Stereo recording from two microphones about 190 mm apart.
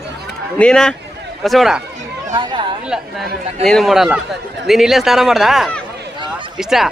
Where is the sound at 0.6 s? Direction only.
5° left (ahead or behind).